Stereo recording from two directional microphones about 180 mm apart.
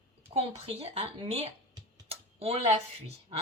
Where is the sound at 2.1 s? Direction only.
35° right (ahead or behind).